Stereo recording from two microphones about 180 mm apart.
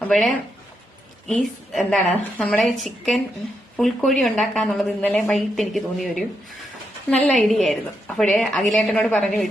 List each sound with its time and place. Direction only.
0.0 s speech: centre (ahead or behind)